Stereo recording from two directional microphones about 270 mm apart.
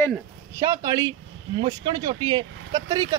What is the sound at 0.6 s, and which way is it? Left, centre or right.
Speech, centre.